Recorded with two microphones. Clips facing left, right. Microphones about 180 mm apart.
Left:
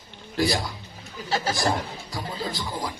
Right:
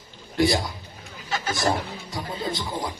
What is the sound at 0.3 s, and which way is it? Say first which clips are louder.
Speech: right 3 dB; 25° right (ahead or behind).